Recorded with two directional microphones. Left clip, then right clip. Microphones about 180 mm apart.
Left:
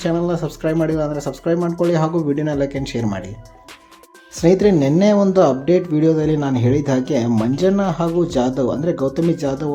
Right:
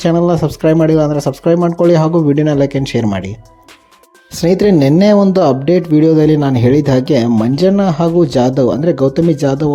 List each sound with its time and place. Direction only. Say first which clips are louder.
0.0 s speech: right 8 dB; 35° right (ahead or behind)
1.5 s speech: right 7 dB; 20° right (ahead or behind)
2.2 s speech: right 8 dB; 35° right (ahead or behind)
4.4 s speech: right 3 dB; 35° right (ahead or behind)